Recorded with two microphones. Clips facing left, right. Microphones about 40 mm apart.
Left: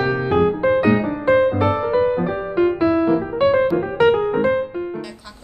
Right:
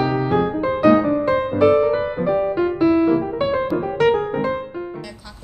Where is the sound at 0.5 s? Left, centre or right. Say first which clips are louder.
Right 1 dB; left.